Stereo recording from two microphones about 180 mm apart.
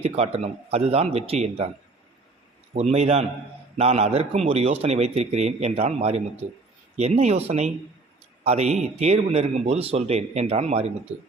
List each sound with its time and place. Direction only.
0.0 s a man's voice: 35° right (ahead or behind)
2.7 s a man's voice: 35° right (ahead or behind)